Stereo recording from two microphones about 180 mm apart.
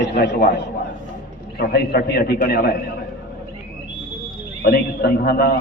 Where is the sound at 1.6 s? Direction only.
60° left (ahead or behind).